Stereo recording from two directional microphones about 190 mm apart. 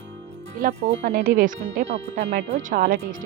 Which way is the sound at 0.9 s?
45° right (ahead or behind).